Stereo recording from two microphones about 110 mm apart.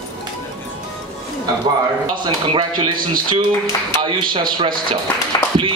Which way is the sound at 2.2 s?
45° right (ahead or behind).